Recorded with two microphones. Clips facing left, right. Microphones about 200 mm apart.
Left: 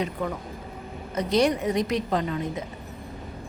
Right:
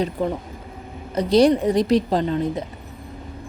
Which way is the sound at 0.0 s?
30° right (ahead or behind).